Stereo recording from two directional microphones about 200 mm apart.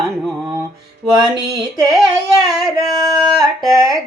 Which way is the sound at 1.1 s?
20° right (ahead or behind).